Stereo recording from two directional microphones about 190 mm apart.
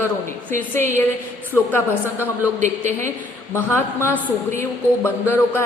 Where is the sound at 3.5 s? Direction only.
10° left (ahead or behind).